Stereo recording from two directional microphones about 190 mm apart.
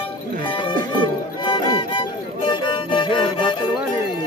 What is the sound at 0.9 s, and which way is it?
Music, 25° left (ahead or behind).